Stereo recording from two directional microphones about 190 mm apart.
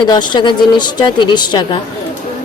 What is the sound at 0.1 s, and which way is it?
Speech, 25° left (ahead or behind).